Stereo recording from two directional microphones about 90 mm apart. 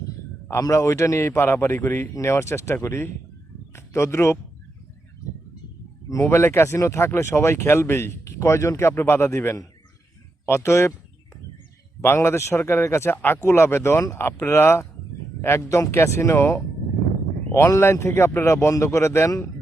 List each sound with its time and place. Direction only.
0.6 s speech: 35° left (ahead or behind)
6.1 s speech: 35° left (ahead or behind)
12.0 s speech: 25° left (ahead or behind)